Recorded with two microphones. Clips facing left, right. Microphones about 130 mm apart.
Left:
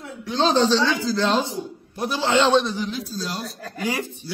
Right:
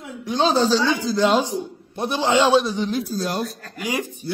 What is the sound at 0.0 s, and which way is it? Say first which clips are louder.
Speech: right 1 dB; 15° right (ahead or behind).